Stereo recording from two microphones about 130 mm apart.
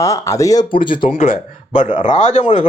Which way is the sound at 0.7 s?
40° left (ahead or behind).